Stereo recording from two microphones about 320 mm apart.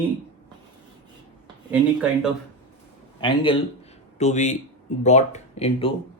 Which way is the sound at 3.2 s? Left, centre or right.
Centre.